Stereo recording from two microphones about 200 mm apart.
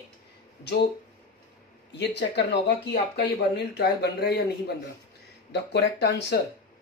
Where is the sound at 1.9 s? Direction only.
60° left (ahead or behind).